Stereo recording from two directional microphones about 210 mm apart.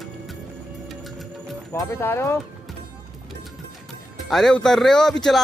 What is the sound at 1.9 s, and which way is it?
Speech, 10° left (ahead or behind).